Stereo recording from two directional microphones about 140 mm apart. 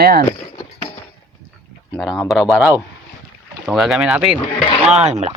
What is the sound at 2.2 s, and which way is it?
Speech, centre (ahead or behind).